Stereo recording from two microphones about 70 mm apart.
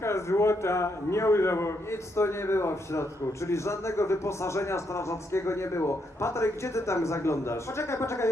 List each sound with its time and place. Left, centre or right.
0.0 s a man's voice: left